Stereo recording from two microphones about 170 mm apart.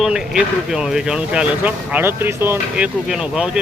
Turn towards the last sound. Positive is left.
turn(degrees=-5)  # may be behind; listen again after turning